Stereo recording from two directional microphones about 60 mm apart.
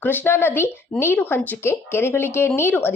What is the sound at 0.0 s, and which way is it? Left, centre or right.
A woman's voice, left.